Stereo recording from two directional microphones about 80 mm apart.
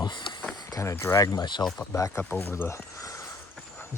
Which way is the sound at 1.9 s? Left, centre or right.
Left.